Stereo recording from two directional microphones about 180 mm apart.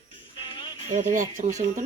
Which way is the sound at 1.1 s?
45° right (ahead or behind).